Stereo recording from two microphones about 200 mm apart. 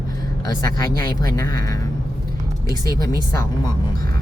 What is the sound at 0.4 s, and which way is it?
A woman's voice, 20° left (ahead or behind).